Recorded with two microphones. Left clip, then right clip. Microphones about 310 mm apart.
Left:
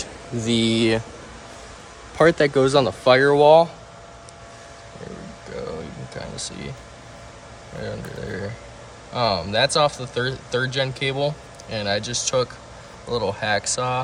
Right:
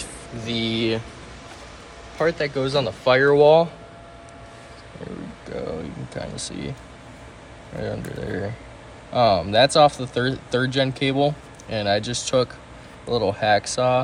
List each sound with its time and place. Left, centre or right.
0.5 s speech: centre
2.1 s speech: centre
6.1 s speech: centre
7.8 s speech: centre